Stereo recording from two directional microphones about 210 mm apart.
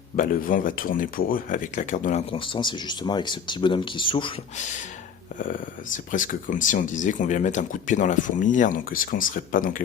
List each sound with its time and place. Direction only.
0.2 s speech: 40° left (ahead or behind)
2.3 s speech: 25° left (ahead or behind)
5.4 s speech: 40° left (ahead or behind)